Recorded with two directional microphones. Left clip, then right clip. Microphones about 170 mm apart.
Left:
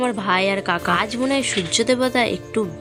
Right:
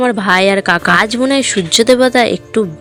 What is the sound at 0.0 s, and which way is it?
Speech, 35° right (ahead or behind).